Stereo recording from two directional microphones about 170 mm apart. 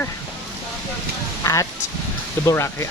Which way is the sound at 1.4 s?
20° left (ahead or behind).